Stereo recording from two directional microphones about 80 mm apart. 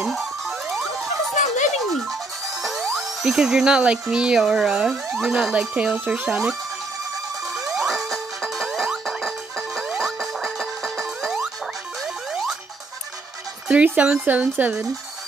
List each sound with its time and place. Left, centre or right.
0.0 s music: centre
1.7 s speech: centre
7.6 s music: centre
13.7 s speech: centre